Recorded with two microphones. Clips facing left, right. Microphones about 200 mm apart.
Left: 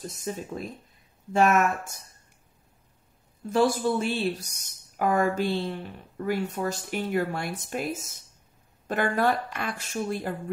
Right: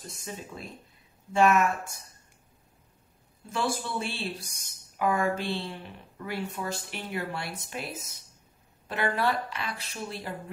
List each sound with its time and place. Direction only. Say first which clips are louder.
0.0 s speech: left 7 dB; 40° left (ahead or behind)
3.5 s speech: left 8 dB; 45° left (ahead or behind)